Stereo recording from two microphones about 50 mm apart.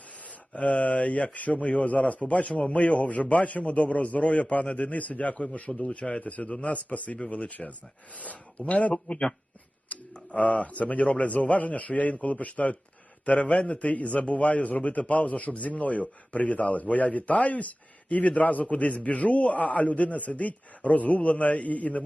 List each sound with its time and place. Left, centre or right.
0.5 s a man's voice: left